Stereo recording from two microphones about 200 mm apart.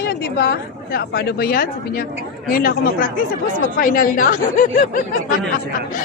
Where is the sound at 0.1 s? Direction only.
55° left (ahead or behind).